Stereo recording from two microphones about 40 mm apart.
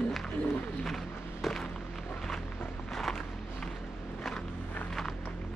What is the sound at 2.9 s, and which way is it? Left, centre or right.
Walk, centre.